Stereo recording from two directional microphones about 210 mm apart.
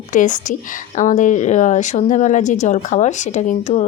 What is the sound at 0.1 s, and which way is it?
Speech, 35° left (ahead or behind).